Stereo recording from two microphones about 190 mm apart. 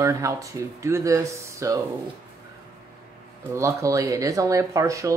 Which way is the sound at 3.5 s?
15° right (ahead or behind).